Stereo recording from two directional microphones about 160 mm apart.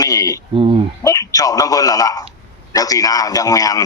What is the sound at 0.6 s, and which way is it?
Speech, 35° right (ahead or behind).